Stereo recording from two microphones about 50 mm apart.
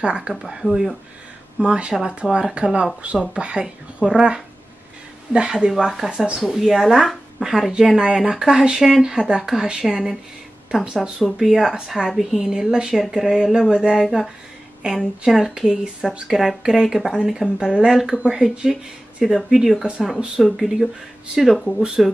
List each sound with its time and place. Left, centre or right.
0.0 s speech: right
0.3 s speech: centre
1.6 s speech: centre
6.4 s speech: centre
16.1 s speech: centre
21.5 s speech: centre